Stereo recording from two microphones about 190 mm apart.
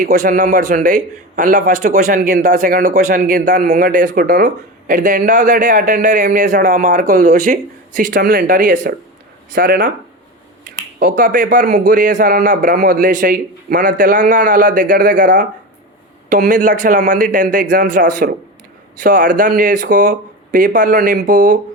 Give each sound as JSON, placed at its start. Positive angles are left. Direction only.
{"t": 0.0, "sound": "a man's voice", "side_deg": -45}
{"t": 11.2, "sound": "a man's voice", "side_deg": -45}
{"t": 16.5, "sound": "a man's voice", "side_deg": -40}